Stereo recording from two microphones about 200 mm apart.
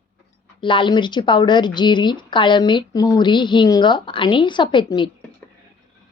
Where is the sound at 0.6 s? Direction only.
25° left (ahead or behind).